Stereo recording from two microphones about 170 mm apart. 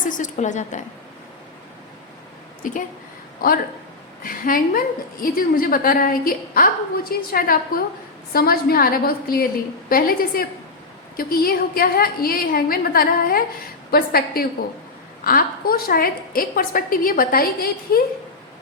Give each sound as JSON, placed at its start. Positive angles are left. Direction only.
{"t": 0.0, "sound": "a woman's voice", "side_deg": 50}
{"t": 3.4, "sound": "a woman's voice", "side_deg": 60}